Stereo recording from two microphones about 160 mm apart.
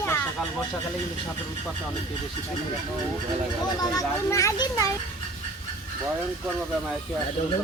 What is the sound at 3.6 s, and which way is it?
Speech, 25° left (ahead or behind).